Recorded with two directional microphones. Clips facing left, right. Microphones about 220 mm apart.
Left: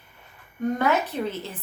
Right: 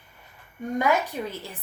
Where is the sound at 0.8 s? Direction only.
15° right (ahead or behind).